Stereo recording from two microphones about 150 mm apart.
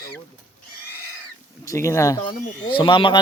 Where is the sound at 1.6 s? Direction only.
20° left (ahead or behind).